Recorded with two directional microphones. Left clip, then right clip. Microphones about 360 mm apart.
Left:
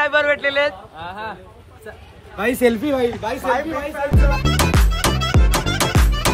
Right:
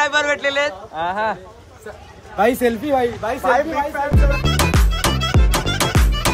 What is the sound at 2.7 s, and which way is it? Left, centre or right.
Speech, centre.